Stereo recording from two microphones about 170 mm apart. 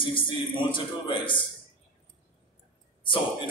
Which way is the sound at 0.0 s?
30° left (ahead or behind).